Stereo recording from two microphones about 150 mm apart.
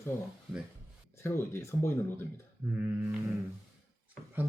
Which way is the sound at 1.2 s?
15° left (ahead or behind).